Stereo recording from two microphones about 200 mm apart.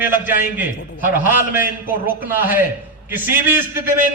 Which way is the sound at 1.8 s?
10° right (ahead or behind).